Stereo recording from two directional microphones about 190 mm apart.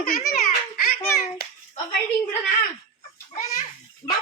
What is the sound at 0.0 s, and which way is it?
Baby laughter, 50° left (ahead or behind).